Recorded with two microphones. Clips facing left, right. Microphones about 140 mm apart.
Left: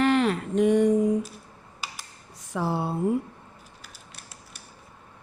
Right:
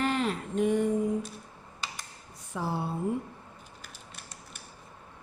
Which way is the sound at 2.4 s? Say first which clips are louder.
Left 5 dB; 85° left.